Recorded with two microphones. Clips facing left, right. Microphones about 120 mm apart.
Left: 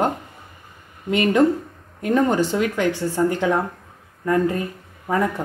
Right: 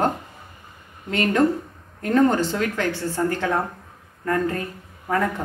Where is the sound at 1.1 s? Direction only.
15° left (ahead or behind).